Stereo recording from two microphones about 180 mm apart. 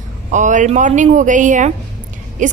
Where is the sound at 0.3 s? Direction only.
45° right (ahead or behind).